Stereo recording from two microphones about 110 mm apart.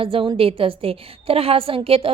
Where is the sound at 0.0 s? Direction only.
55° right (ahead or behind).